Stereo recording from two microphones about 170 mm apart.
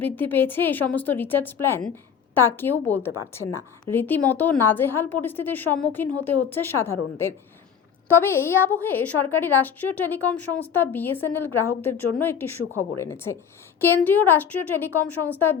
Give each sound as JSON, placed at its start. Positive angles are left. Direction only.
{"t": 0.0, "sound": "a woman's voice", "side_deg": 10}